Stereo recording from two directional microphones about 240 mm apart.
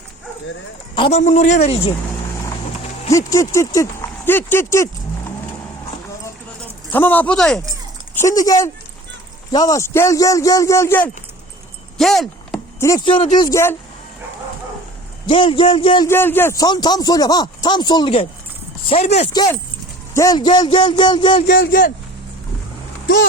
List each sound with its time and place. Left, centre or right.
0.9 s a woman's voice: left
3.1 s speech: centre
6.9 s speech: centre
11.9 s a sound: centre
12.8 s speech: centre
15.3 s a woman's voice: left
16.0 s a woman's voice: centre
21.3 s a man's voice: left